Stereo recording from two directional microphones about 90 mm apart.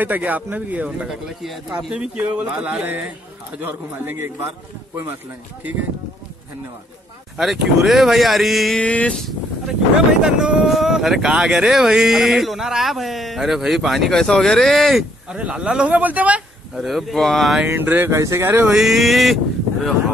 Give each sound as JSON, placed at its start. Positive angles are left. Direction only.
{"t": 0.0, "sound": "a man's voice", "side_deg": -20}
{"t": 7.3, "sound": "speech", "side_deg": -5}
{"t": 8.7, "sound": "a sound", "side_deg": 15}
{"t": 10.2, "sound": "speech", "side_deg": -5}
{"t": 15.3, "sound": "speech", "side_deg": -10}
{"t": 16.7, "sound": "speech", "side_deg": 0}
{"t": 17.6, "sound": "a man's voice", "side_deg": -20}
{"t": 18.1, "sound": "speech", "side_deg": -35}
{"t": 18.7, "sound": "speech", "side_deg": -5}